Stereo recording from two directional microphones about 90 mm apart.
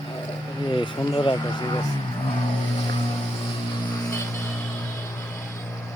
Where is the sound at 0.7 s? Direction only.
65° left (ahead or behind).